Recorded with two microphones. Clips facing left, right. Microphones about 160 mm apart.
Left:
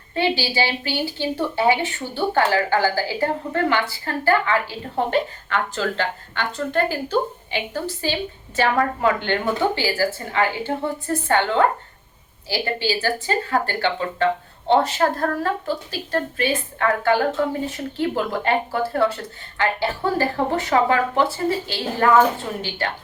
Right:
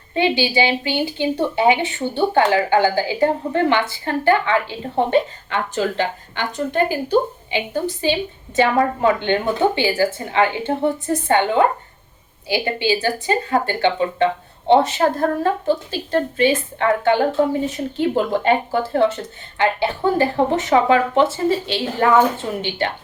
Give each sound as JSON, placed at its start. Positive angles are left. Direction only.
{"t": 0.1, "sound": "a woman's voice", "side_deg": -20}